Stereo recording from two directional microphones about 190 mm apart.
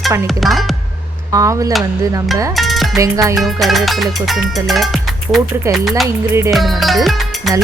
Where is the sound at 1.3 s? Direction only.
15° right (ahead or behind).